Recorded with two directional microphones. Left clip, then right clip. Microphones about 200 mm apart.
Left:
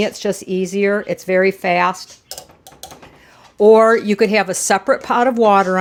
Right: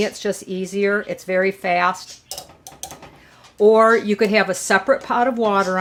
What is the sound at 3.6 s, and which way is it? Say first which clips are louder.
Speech: left 3 dB; 40° left (ahead or behind).